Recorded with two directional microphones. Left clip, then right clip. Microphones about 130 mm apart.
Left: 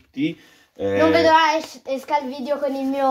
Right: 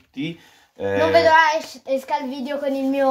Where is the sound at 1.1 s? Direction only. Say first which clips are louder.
Right 2 dB; 40° left (ahead or behind).